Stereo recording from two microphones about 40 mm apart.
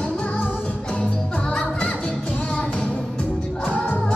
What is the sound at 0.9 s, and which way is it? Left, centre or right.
Music, left.